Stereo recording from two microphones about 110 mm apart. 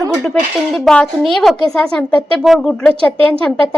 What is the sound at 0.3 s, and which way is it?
A woman's voice, 5° left (ahead or behind).